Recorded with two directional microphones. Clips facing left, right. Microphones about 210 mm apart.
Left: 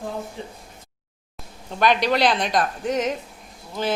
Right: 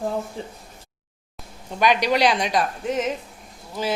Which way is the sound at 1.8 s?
10° right (ahead or behind).